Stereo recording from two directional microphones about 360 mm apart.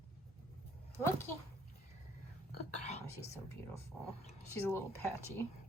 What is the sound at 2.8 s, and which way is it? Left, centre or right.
Whispering, centre.